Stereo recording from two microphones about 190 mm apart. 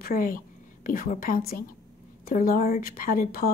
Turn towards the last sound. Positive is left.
turn(degrees=50)  # may be behind; listen again after turning